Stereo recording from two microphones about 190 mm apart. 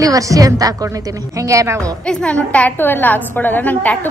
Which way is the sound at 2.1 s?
5° left (ahead or behind).